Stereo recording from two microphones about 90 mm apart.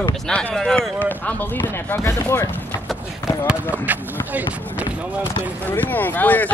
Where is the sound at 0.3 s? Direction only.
15° left (ahead or behind).